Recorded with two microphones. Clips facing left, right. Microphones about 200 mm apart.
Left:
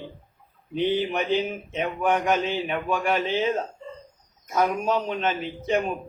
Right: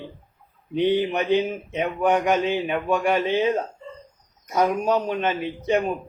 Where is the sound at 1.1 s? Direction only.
15° right (ahead or behind).